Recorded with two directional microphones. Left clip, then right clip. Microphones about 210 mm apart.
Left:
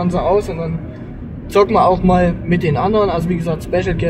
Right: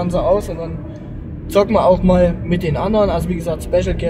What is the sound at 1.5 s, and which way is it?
A man's voice, 20° right (ahead or behind).